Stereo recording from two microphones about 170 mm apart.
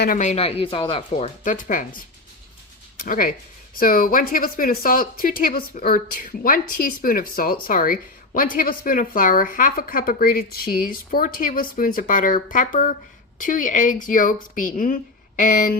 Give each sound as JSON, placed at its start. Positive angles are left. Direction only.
{"t": 0.2, "sound": "speech", "side_deg": 40}
{"t": 1.5, "sound": "a woman's voice", "side_deg": 50}
{"t": 3.0, "sound": "a woman's voice", "side_deg": 55}